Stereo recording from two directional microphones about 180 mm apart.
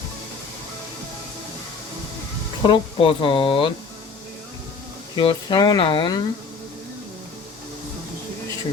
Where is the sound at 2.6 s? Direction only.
30° left (ahead or behind).